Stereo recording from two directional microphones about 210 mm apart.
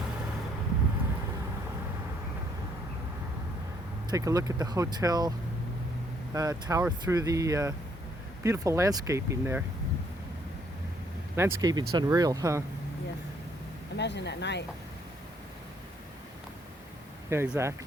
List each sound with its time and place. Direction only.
4.1 s speech: 15° right (ahead or behind)
6.3 s speech: 15° right (ahead or behind)
11.3 s speech: 15° right (ahead or behind)
13.9 s speech: 55° left (ahead or behind)
17.2 s speech: 10° right (ahead or behind)